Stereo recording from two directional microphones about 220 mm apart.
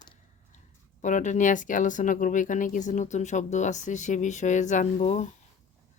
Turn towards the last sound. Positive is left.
turn(degrees=30)  # may be behind; listen again after turning